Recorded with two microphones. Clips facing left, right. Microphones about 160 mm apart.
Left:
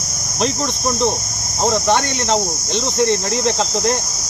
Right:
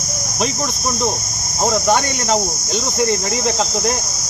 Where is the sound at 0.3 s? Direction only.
5° right (ahead or behind).